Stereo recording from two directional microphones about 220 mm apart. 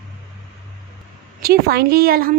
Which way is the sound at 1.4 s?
45° right (ahead or behind).